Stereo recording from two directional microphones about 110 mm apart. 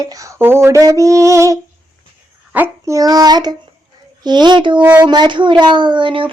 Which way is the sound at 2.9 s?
35° right (ahead or behind).